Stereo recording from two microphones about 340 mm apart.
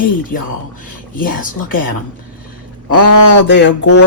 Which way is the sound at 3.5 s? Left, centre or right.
Left.